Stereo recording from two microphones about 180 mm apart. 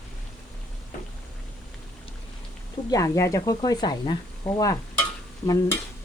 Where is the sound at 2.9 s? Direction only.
15° left (ahead or behind).